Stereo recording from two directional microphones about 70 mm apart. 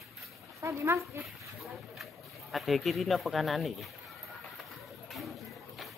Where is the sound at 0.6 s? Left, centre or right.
Right.